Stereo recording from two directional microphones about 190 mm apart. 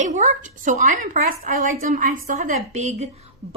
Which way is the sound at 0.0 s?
40° right (ahead or behind).